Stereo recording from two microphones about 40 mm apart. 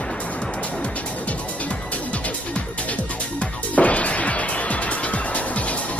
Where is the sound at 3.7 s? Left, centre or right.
Left.